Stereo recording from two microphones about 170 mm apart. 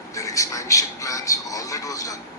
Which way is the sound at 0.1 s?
20° left (ahead or behind).